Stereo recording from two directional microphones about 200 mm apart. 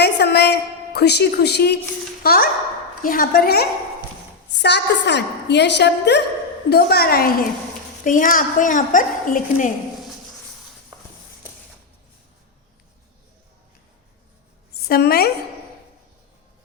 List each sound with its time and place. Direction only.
0.0 s a sound: 55° left (ahead or behind)
2.2 s a woman's voice: 50° left (ahead or behind)
14.8 s a woman's voice: 50° left (ahead or behind)